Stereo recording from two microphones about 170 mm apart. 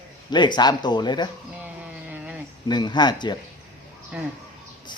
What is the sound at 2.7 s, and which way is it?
Speech, 25° left (ahead or behind).